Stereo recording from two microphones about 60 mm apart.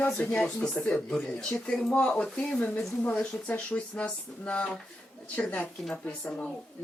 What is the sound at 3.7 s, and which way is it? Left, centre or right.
Speech, left.